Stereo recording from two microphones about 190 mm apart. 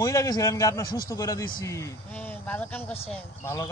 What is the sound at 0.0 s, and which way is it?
Speech, 15° left (ahead or behind).